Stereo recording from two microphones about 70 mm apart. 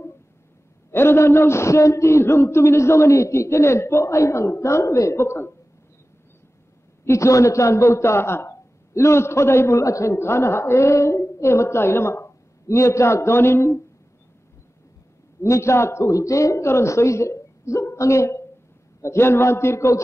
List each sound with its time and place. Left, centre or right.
0.9 s a man's voice: left
7.1 s a man's voice: left
15.4 s a man's voice: left